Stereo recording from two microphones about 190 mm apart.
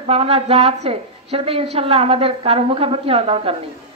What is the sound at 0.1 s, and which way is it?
A woman's voice, 30° right (ahead or behind).